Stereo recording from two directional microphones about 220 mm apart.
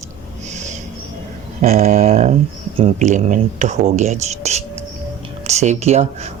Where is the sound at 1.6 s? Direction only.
30° right (ahead or behind).